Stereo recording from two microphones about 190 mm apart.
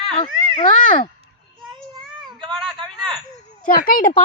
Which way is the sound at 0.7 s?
45° left (ahead or behind).